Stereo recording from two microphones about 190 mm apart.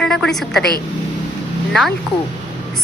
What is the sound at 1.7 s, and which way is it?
Speech, centre (ahead or behind).